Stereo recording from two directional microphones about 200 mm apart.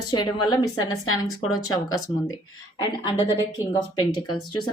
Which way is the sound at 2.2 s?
20° left (ahead or behind).